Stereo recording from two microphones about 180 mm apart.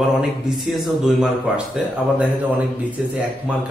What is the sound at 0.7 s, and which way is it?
Speech, centre (ahead or behind).